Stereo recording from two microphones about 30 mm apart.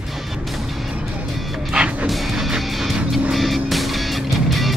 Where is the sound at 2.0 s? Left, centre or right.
Centre.